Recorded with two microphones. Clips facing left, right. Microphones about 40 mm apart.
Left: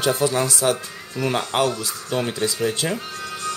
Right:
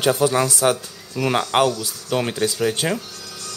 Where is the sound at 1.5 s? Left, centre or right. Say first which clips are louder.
Right 3 dB; right.